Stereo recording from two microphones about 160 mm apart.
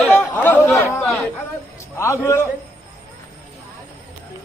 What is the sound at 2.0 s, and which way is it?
Speech, 15° left (ahead or behind).